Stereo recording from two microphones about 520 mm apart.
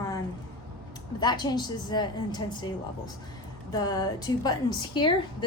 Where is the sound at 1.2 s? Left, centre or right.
Centre.